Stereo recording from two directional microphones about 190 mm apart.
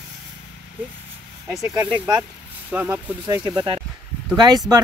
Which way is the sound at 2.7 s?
10° right (ahead or behind).